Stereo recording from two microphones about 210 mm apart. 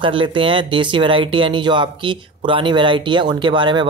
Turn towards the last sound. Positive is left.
turn(degrees=-20)  # may be behind; listen again after turning